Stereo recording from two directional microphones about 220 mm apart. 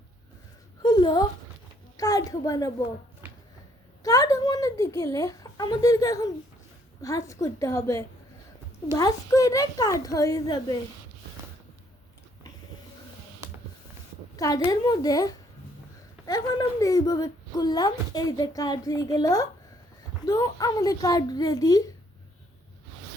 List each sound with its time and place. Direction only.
0.8 s a sound: 20° left (ahead or behind)
2.0 s speech: 15° left (ahead or behind)
4.0 s speech: 15° left (ahead or behind)
14.3 s speech: 15° left (ahead or behind)